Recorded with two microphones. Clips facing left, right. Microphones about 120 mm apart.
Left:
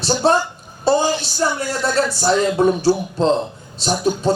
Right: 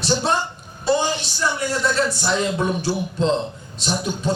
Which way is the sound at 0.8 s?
40° left (ahead or behind).